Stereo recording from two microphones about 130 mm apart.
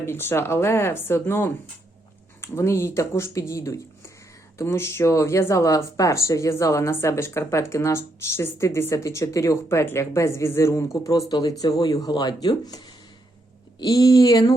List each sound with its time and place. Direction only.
0.0 s speech: 15° left (ahead or behind)